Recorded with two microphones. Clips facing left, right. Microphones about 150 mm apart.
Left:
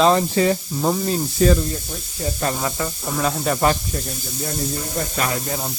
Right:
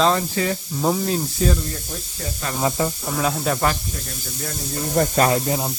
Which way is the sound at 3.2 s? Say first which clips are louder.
Left 1 dB; centre (ahead or behind).